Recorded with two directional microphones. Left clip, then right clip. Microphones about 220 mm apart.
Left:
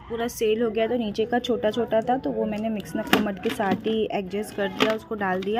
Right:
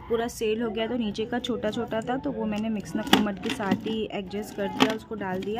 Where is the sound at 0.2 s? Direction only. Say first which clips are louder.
Left 4 dB; 5° left (ahead or behind).